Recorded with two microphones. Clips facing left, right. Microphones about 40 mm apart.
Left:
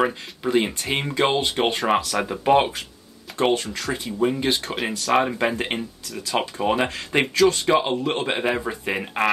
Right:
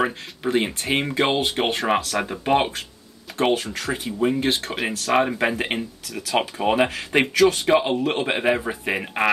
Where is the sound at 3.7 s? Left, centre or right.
Right.